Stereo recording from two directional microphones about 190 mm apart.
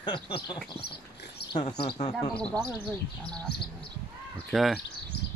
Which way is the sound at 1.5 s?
25° left (ahead or behind).